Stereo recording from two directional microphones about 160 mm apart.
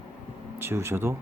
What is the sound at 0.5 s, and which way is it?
Speech, 15° right (ahead or behind).